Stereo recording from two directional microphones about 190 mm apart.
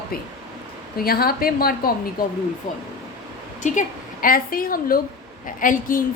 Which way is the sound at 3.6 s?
40° left (ahead or behind).